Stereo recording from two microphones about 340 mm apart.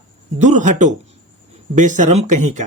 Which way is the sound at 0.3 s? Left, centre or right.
Right.